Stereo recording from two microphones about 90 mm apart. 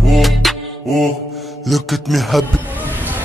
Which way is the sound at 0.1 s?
Centre (ahead or behind).